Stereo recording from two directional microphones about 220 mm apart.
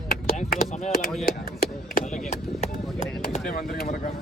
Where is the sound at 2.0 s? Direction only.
35° left (ahead or behind).